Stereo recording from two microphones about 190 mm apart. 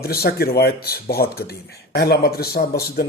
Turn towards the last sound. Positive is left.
turn(degrees=55)  # may be behind; listen again after turning